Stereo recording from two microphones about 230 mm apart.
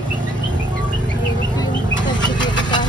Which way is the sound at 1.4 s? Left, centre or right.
Centre.